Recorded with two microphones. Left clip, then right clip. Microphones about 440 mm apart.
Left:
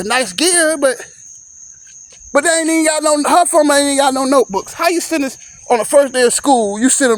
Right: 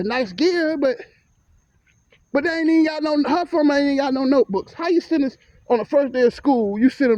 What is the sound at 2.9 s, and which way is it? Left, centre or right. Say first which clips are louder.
Speech: left 8 dB; right.